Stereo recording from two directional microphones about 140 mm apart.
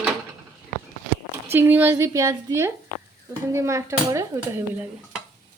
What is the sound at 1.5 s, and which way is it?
A woman's voice, 15° right (ahead or behind).